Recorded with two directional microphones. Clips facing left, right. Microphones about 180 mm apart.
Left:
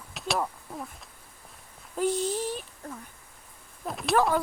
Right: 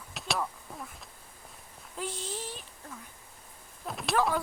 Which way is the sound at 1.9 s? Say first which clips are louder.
Left 10 dB; 45° left (ahead or behind).